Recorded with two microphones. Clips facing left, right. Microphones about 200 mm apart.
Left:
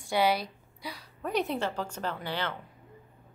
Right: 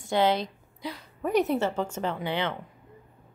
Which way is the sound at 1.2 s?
15° right (ahead or behind).